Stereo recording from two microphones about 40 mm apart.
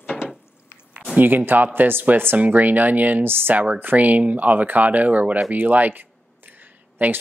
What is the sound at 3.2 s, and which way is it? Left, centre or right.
Speech, right.